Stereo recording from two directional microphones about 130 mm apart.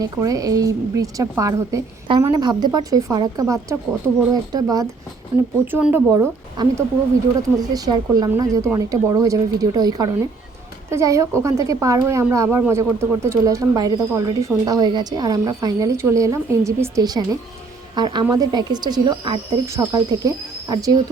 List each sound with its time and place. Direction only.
0.0 s speech: 25° right (ahead or behind)
5.3 s speech: 10° right (ahead or behind)
6.1 s speech: 25° right (ahead or behind)